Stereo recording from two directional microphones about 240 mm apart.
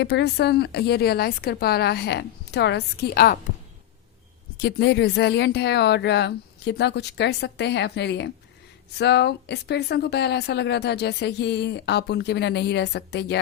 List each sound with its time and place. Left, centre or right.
0.0 s a woman's voice: left
4.5 s a woman's voice: left